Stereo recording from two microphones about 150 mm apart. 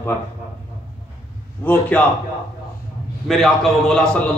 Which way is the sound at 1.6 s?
10° left (ahead or behind).